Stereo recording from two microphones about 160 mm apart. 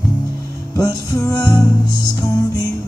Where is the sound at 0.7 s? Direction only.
20° left (ahead or behind).